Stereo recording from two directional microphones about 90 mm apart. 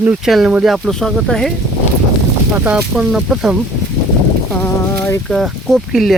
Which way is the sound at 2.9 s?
5° right (ahead or behind).